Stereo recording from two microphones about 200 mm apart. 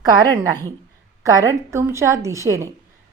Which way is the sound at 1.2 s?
15° right (ahead or behind).